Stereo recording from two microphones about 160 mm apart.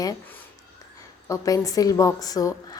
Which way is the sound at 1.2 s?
20° left (ahead or behind).